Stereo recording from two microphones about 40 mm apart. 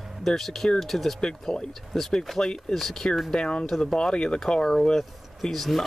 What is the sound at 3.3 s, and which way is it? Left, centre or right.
Speech, left.